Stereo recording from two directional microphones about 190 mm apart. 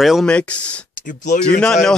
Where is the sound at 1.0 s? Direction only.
40° left (ahead or behind).